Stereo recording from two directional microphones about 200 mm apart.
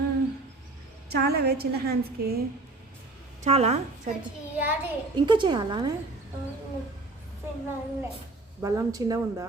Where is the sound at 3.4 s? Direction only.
30° right (ahead or behind).